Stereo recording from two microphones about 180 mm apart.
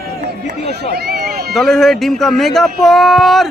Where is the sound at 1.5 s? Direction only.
Centre (ahead or behind).